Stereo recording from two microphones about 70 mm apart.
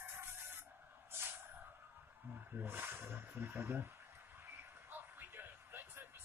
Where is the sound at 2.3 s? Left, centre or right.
Right.